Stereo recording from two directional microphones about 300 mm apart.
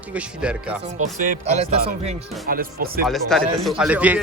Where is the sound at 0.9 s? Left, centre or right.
Right.